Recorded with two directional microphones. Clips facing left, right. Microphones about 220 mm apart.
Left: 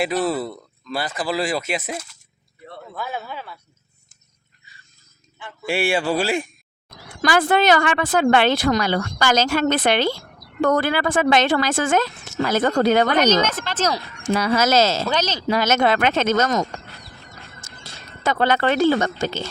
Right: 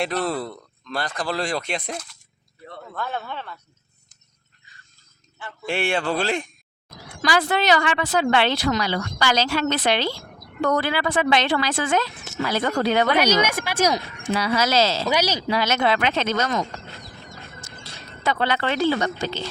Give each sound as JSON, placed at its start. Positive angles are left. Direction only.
{"t": 0.0, "sound": "a man's voice", "side_deg": 5}
{"t": 5.5, "sound": "a man's voice", "side_deg": 10}
{"t": 7.2, "sound": "speech", "side_deg": 50}
{"t": 13.1, "sound": "speech", "side_deg": -10}
{"t": 14.3, "sound": "speech", "side_deg": 50}
{"t": 15.0, "sound": "speech", "side_deg": -10}
{"t": 15.4, "sound": "speech", "side_deg": 45}
{"t": 17.6, "sound": "a sound", "side_deg": 45}
{"t": 18.2, "sound": "speech", "side_deg": 45}